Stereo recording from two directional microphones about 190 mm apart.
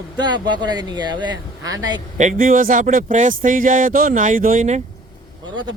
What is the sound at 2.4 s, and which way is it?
Speech, 45° right (ahead or behind).